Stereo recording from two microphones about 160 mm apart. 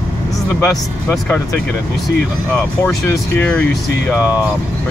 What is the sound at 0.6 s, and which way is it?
Speech, 15° left (ahead or behind).